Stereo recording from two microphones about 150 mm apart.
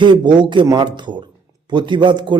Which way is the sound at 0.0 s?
30° right (ahead or behind).